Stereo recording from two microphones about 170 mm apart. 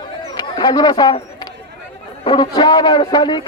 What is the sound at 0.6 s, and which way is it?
Speech, 25° left (ahead or behind).